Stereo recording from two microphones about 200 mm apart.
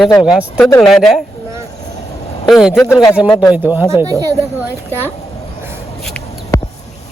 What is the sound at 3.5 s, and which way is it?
Speech, 10° right (ahead or behind).